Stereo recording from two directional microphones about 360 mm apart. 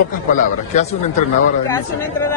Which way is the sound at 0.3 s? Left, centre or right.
Left.